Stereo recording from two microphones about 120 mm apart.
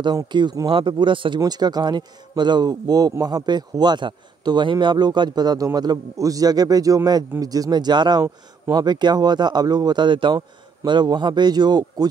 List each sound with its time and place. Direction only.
0.0 s a man's voice: 40° right (ahead or behind)